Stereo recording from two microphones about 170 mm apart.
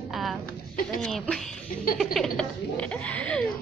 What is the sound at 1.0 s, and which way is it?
Speech, 5° left (ahead or behind).